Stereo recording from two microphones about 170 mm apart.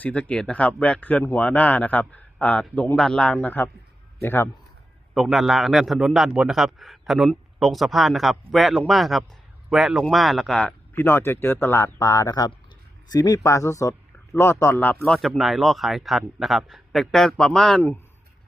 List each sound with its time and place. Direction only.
0.0 s a man's voice: 10° left (ahead or behind)
5.1 s a man's voice: centre (ahead or behind)